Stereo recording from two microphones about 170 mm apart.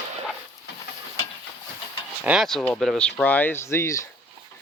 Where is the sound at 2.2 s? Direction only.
5° right (ahead or behind).